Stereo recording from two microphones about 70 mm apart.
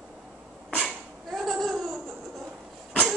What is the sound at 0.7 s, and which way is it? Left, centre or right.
Laughter, centre.